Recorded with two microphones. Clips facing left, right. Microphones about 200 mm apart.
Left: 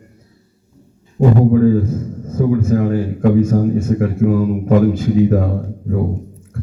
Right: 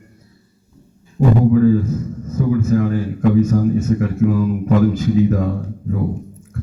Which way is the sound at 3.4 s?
30° left (ahead or behind).